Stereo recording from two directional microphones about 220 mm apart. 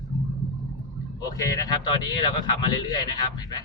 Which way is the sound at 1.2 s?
15° left (ahead or behind).